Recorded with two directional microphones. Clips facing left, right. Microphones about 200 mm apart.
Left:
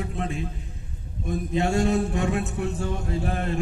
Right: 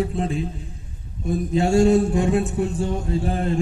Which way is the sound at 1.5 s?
30° right (ahead or behind).